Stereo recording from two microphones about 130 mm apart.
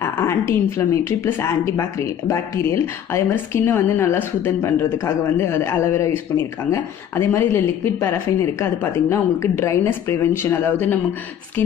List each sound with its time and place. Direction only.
0.0 s speech: 20° left (ahead or behind)